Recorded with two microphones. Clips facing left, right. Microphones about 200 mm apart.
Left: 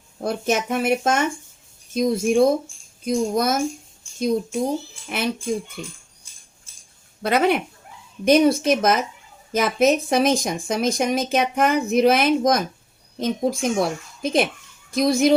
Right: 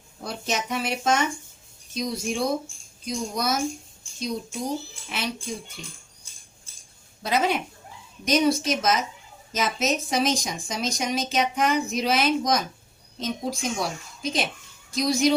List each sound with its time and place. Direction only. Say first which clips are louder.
0.2 s speech: left 7 dB; 50° left (ahead or behind)
7.2 s speech: left 5 dB; 60° left (ahead or behind)